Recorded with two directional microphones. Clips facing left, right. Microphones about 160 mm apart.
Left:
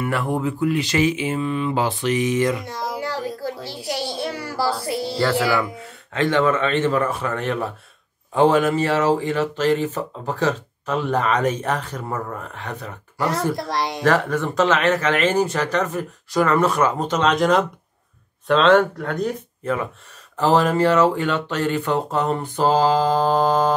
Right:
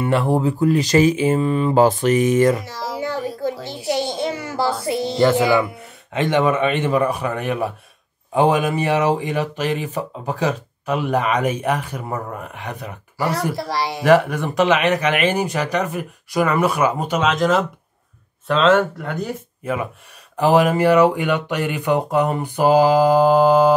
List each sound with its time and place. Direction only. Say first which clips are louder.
0.0 s speech: right 4 dB; 30° right (ahead or behind); by 2.6 s 45° right (ahead or behind)
2.6 s speech: left 1 dB; 5° right (ahead or behind)
2.9 s a sound: right 4 dB; 20° right (ahead or behind)
4.8 s speech: right 5 dB; 20° right (ahead or behind)